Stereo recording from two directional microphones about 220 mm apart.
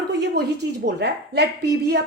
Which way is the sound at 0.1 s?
50° right (ahead or behind).